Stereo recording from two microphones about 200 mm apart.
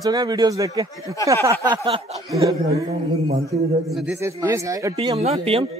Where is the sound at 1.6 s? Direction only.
25° right (ahead or behind).